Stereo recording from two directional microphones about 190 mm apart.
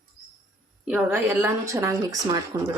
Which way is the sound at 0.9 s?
5° right (ahead or behind).